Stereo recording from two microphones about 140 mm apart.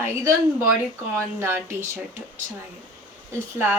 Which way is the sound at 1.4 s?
15° right (ahead or behind).